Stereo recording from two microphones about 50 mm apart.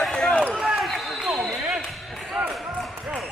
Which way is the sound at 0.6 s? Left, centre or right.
Centre.